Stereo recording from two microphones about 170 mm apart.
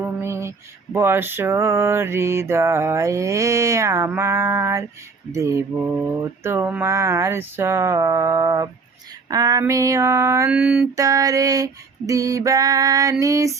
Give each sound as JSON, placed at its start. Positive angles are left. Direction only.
{"t": 0.0, "sound": "mantra", "side_deg": -15}
{"t": 9.3, "sound": "female singing", "side_deg": -20}
{"t": 10.5, "sound": "mantra", "side_deg": -5}
{"t": 10.9, "sound": "female singing", "side_deg": -20}